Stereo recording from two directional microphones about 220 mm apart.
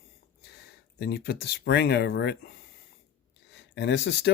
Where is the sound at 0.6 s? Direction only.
45° left (ahead or behind).